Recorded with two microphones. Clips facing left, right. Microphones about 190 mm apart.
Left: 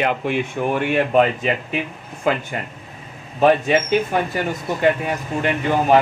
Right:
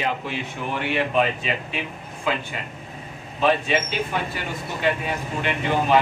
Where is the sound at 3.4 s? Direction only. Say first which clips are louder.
Left 6 dB; 50° left (ahead or behind).